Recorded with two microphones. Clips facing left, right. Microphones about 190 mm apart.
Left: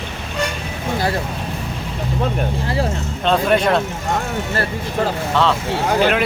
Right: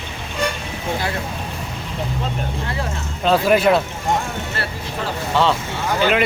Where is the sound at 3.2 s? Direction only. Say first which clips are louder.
Right 1 dB; 5° right (ahead or behind).